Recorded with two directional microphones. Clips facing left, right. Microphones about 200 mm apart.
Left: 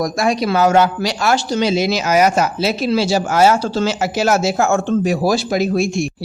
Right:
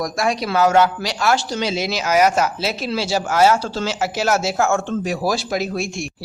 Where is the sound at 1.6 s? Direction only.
45° left (ahead or behind).